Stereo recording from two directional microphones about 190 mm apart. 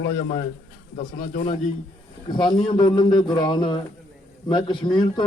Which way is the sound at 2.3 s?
25° left (ahead or behind).